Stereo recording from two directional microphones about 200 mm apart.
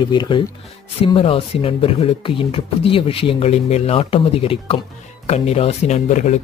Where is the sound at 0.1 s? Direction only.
20° left (ahead or behind).